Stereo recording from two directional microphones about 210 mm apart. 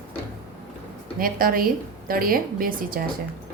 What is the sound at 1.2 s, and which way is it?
A woman's voice, 45° right (ahead or behind).